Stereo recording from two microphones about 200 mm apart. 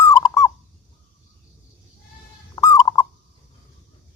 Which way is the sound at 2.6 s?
15° left (ahead or behind).